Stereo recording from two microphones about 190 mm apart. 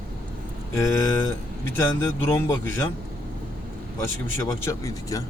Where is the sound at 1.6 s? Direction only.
10° left (ahead or behind).